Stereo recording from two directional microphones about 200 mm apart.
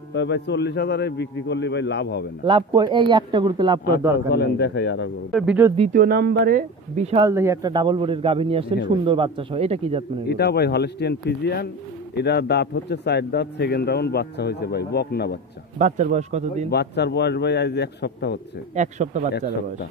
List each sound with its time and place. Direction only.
0.1 s speech: 60° left (ahead or behind)
2.4 s a man's voice: 25° right (ahead or behind)
4.3 s speech: 55° left (ahead or behind)
5.3 s speech: 5° right (ahead or behind)
5.9 s speech: 50° right (ahead or behind)
7.2 s a man's voice: 15° right (ahead or behind); by 10.0 s 30° right (ahead or behind)
10.2 s speech: 55° left (ahead or behind)
15.8 s a man's voice: 35° right (ahead or behind)
16.7 s speech: 55° left (ahead or behind)
18.8 s a man's voice: 35° right (ahead or behind)